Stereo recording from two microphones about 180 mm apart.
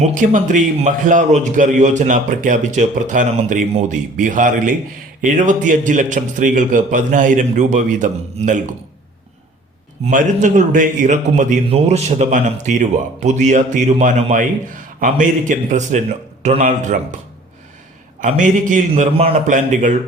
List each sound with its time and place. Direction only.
0.0 s a man's voice: 45° right (ahead or behind)
10.1 s a man's voice: 45° right (ahead or behind)
18.2 s a man's voice: 45° right (ahead or behind)